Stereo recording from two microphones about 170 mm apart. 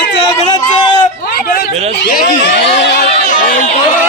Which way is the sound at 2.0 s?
75° left (ahead or behind).